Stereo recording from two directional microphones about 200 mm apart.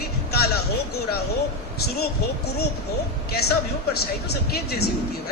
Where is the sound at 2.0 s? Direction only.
55° left (ahead or behind).